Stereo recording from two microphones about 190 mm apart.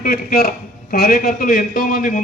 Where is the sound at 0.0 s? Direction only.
50° left (ahead or behind).